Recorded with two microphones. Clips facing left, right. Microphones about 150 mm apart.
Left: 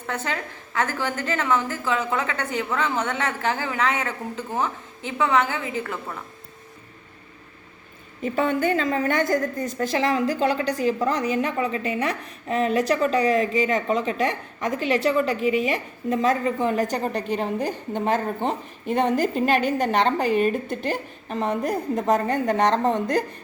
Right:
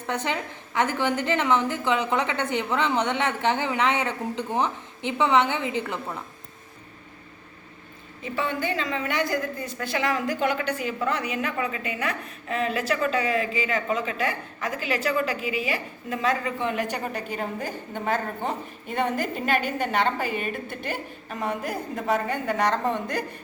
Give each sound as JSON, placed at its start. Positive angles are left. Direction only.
{"t": 0.1, "sound": "a woman's voice", "side_deg": -15}
{"t": 8.2, "sound": "a woman's voice", "side_deg": 45}